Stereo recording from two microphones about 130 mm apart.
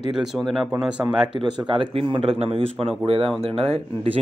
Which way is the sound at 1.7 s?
40° right (ahead or behind).